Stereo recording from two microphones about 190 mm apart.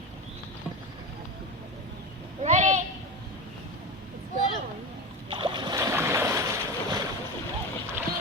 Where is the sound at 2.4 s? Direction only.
40° right (ahead or behind).